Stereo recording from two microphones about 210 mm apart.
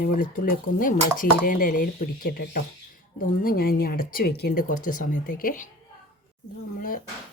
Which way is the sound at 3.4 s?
45° left (ahead or behind).